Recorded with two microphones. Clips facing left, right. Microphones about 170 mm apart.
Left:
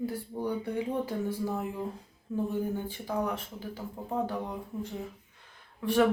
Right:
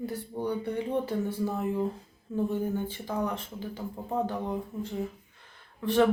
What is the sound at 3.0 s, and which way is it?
Speech, 5° left (ahead or behind).